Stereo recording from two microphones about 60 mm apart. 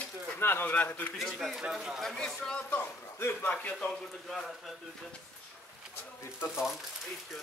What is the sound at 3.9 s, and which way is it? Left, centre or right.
Speech, centre.